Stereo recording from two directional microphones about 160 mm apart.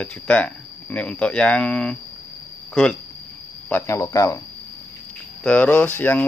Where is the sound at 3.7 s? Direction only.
20° left (ahead or behind).